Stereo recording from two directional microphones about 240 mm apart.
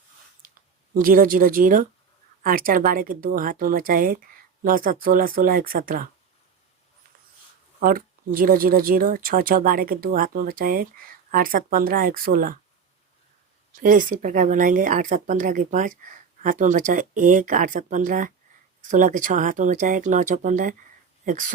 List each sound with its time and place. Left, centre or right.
0.4 s a sound: right
0.9 s speech: right
7.8 s speech: right
13.8 s speech: right